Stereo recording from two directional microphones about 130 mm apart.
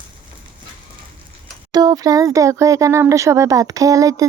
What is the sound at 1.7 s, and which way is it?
Speech, 30° right (ahead or behind).